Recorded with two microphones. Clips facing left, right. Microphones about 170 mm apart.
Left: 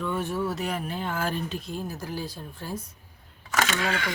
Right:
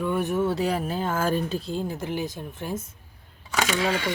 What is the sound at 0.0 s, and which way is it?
Speech, 15° right (ahead or behind).